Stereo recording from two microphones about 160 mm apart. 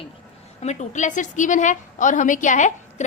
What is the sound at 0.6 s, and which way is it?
A woman's voice, 45° left (ahead or behind).